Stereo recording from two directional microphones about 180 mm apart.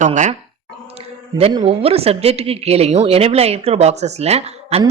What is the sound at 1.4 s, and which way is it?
A woman's voice, 30° right (ahead or behind).